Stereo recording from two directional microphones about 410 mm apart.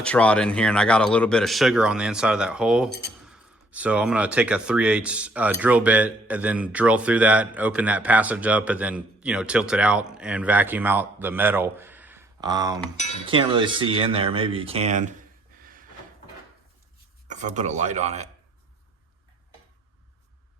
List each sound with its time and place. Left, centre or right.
0.0 s speech: centre
17.2 s speech: centre